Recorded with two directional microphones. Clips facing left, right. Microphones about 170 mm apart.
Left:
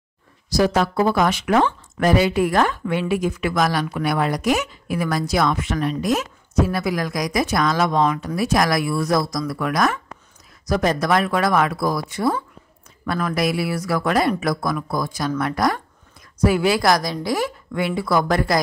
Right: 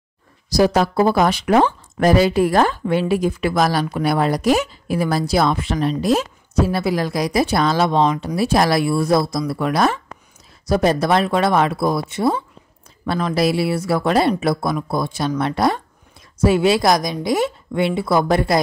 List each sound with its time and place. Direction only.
0.5 s a woman's voice: 35° right (ahead or behind)